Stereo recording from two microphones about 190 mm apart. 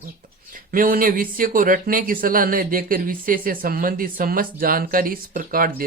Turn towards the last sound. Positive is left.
turn(degrees=-50)  # may be behind; listen again after turning